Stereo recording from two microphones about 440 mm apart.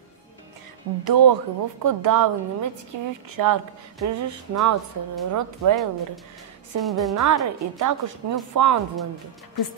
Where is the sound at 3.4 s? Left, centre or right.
Right.